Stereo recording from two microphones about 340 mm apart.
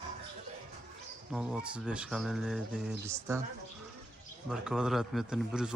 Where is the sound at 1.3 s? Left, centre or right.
Centre.